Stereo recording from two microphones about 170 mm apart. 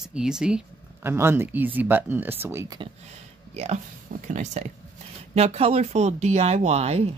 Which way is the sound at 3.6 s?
40° right (ahead or behind).